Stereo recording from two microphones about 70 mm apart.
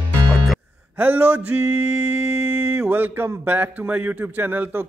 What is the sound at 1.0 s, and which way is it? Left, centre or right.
Speech, right.